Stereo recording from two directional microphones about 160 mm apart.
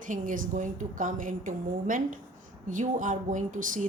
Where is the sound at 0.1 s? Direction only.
55° right (ahead or behind).